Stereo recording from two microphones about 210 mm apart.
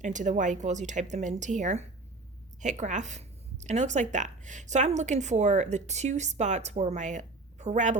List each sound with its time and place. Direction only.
0.0 s a woman's voice: 35° right (ahead or behind)